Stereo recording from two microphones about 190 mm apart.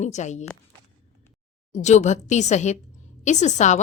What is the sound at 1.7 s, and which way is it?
A woman's voice, 35° left (ahead or behind).